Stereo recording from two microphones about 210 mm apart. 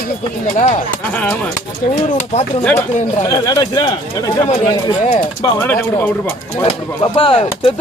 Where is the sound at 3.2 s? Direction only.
15° left (ahead or behind).